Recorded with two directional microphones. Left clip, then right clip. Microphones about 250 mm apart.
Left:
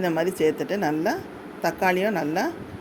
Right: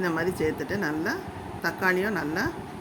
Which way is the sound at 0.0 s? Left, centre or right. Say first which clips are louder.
Left 4 dB; centre.